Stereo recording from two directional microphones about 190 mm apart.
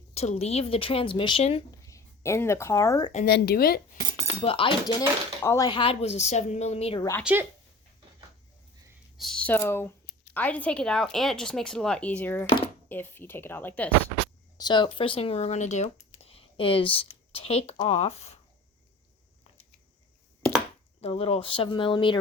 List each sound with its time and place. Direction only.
0.1 s speech: 35° left (ahead or behind)
1.8 s speech: 15° left (ahead or behind)
3.2 s speech: 55° left (ahead or behind)
4.4 s speech: 25° left (ahead or behind)
5.4 s speech: 15° left (ahead or behind); by 7.0 s 30° left (ahead or behind)
7.3 s speech: 5° right (ahead or behind)
9.1 s speech: centre (ahead or behind)
14.6 s speech: 25° left (ahead or behind)
21.0 s speech: 30° left (ahead or behind)